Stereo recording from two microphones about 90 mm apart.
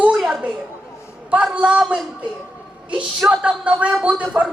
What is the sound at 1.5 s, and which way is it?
Speech, 10° right (ahead or behind).